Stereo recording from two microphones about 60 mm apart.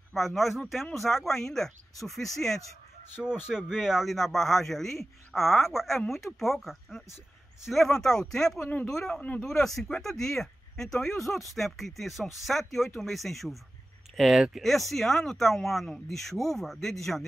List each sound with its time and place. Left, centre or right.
0.1 s a man's voice: centre
3.4 s a man's voice: centre
9.1 s speech: left
9.4 s a man's voice: centre